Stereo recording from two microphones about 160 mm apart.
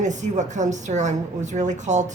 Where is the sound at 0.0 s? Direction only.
50° right (ahead or behind).